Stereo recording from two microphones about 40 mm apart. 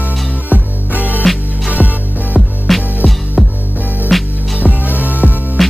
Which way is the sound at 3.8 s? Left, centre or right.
Left.